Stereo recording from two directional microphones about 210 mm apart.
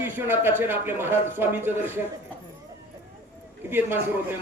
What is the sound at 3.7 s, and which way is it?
Speech, 10° right (ahead or behind).